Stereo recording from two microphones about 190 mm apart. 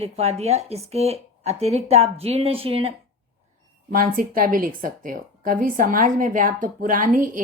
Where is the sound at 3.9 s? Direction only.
45° right (ahead or behind).